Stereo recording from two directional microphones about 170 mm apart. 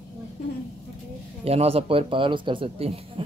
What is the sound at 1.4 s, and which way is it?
Speech, 35° right (ahead or behind).